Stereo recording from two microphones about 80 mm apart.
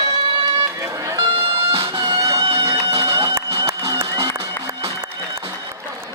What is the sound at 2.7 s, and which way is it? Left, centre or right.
Music, right.